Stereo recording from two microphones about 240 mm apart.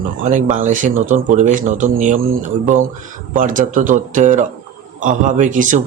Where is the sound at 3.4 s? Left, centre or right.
Right.